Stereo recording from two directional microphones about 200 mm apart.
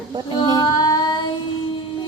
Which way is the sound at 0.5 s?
20° left (ahead or behind).